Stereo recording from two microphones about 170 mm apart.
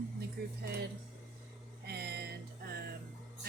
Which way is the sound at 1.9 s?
70° right (ahead or behind).